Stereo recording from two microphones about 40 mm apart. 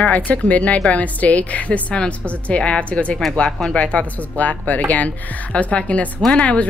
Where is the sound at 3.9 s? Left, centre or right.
Left.